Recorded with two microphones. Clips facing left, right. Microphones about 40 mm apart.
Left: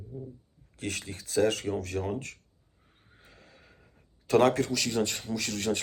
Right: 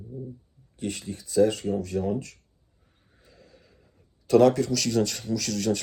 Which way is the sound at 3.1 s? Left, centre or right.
Left.